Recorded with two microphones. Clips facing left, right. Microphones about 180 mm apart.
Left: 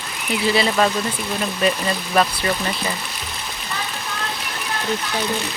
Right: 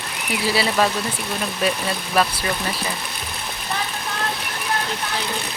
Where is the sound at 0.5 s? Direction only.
5° right (ahead or behind).